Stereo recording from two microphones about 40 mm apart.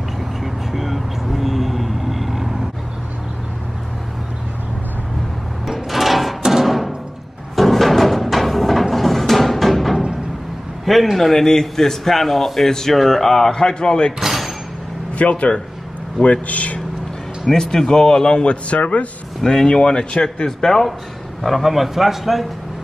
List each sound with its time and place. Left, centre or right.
0.4 s vehicle: centre
5.7 s drawer open or close: centre
6.4 s music: centre
10.9 s a man's voice: centre; by 14.1 s left
14.2 s a sound: centre
15.1 s a man's voice: left
17.5 s speech: centre; by 19.0 s left
19.4 s speech: centre
20.4 s a man's voice: centre
21.4 s a man's voice: centre